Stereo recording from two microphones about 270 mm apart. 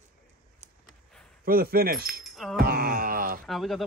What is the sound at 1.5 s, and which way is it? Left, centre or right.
Speech, right.